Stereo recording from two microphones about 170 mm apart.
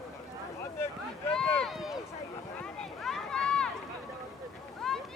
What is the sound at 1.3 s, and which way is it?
Speech, 5° left (ahead or behind).